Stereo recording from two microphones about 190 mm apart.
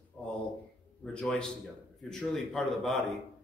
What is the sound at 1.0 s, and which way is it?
A man's voice, 5° left (ahead or behind).